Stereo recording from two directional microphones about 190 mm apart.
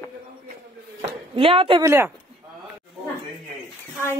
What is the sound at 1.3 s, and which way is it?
Speech, 30° right (ahead or behind).